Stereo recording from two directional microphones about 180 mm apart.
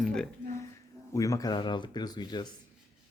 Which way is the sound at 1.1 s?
20° left (ahead or behind).